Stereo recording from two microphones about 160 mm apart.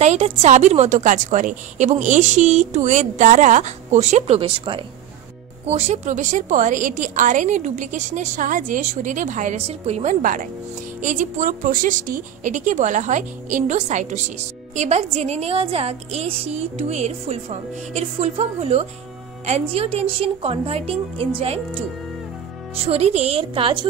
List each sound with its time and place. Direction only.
0.0 s a woman's voice: 45° right (ahead or behind)
5.7 s a woman's voice: 45° right (ahead or behind)
22.8 s a woman's voice: 40° right (ahead or behind)